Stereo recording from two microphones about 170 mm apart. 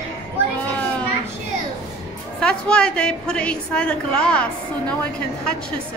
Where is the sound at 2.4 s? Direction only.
5° left (ahead or behind).